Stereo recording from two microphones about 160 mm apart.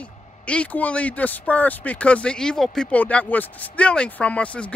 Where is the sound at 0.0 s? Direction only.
10° left (ahead or behind).